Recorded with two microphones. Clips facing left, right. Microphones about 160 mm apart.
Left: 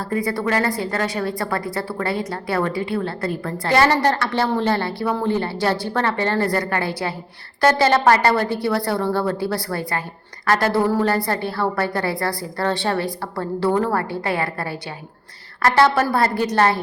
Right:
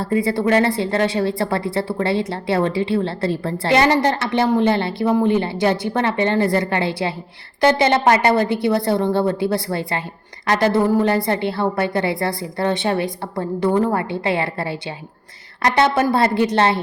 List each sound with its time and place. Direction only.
0.0 s a woman's voice: 25° right (ahead or behind)